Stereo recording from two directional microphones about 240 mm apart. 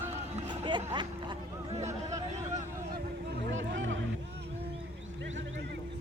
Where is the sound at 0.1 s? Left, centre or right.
Right.